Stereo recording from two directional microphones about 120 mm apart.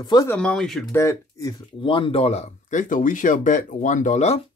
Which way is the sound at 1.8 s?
45° left (ahead or behind).